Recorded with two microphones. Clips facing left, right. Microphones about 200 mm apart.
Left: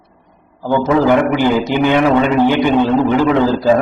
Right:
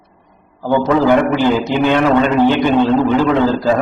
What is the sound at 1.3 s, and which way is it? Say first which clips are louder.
A man's voice: even; 15° left (ahead or behind).